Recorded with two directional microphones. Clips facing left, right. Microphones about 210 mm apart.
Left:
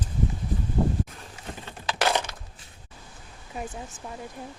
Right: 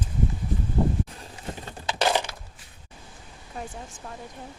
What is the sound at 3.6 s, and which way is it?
Speech, 5° left (ahead or behind).